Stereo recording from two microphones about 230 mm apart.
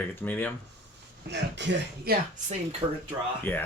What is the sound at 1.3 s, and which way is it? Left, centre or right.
Speech, right.